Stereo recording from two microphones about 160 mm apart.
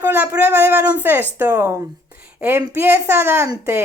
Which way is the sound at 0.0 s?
10° right (ahead or behind).